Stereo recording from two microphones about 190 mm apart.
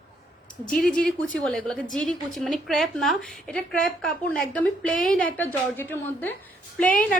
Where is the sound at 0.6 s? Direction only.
5° left (ahead or behind).